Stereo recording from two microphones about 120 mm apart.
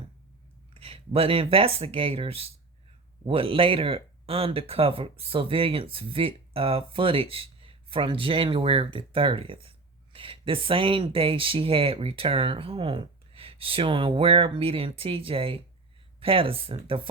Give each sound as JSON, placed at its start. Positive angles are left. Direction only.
{"t": 0.7, "sound": "speech", "side_deg": -55}